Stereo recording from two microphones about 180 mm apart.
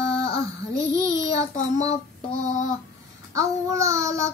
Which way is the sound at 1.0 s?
15° right (ahead or behind).